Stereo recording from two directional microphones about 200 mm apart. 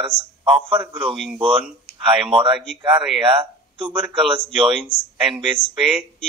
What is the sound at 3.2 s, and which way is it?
Speech, 25° right (ahead or behind).